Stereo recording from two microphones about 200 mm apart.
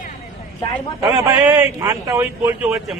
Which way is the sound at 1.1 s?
15° right (ahead or behind).